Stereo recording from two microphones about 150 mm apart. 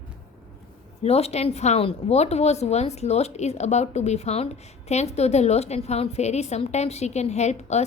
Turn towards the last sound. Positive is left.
turn(degrees=45)  # may be behind; listen again after turning